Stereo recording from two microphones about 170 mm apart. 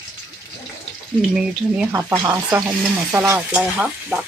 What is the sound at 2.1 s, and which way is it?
Speech, 20° right (ahead or behind).